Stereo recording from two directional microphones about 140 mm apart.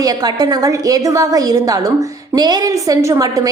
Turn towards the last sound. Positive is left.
turn(degrees=-25)  # may be behind; listen again after turning